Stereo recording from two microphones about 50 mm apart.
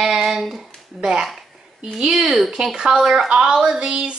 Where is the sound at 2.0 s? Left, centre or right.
Centre.